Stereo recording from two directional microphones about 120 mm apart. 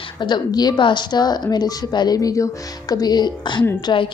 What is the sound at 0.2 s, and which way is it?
Speech, 35° left (ahead or behind).